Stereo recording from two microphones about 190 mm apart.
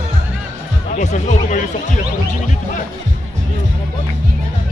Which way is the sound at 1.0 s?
40° left (ahead or behind).